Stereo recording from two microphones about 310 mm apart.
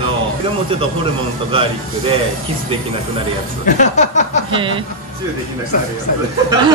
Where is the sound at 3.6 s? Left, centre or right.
Left.